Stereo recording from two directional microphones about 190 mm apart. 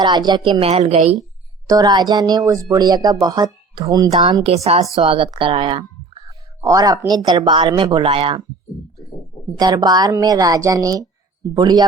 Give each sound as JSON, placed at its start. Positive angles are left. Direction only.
{"t": 0.0, "sound": "speech", "side_deg": -20}
{"t": 1.6, "sound": "speech", "side_deg": -20}
{"t": 9.6, "sound": "speech", "side_deg": -20}